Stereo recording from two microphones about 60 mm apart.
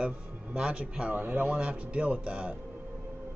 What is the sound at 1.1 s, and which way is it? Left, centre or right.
A man's voice, right.